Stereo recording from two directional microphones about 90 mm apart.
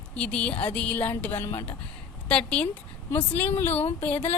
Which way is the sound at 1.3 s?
30° left (ahead or behind).